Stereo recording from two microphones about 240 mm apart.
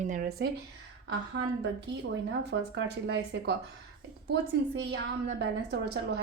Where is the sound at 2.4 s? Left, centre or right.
Right.